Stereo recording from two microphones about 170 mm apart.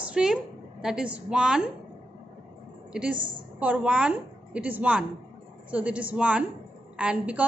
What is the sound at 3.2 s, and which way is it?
Speech, 30° right (ahead or behind).